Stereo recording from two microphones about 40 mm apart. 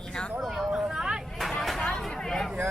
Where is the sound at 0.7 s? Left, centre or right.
Centre.